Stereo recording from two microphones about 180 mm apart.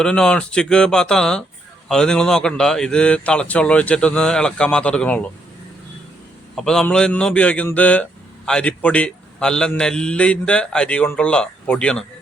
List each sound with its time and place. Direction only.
0.0 s a man's voice: 5° left (ahead or behind)
6.6 s a man's voice: 5° left (ahead or behind)